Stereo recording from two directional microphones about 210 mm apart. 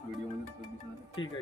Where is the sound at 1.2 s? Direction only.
20° left (ahead or behind).